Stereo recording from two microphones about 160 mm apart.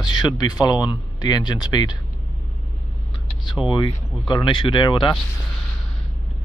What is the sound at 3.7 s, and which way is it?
Speech, 30° left (ahead or behind).